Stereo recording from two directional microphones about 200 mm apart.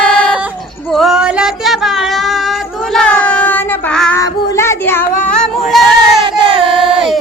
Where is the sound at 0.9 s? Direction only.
Centre (ahead or behind).